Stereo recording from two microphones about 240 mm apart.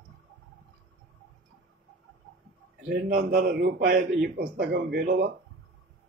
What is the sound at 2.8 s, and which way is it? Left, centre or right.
A man's voice, right.